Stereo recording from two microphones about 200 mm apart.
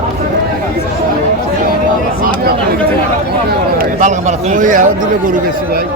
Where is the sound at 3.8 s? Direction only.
40° right (ahead or behind).